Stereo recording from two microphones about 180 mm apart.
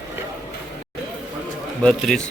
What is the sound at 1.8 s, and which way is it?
Speech, 5° left (ahead or behind).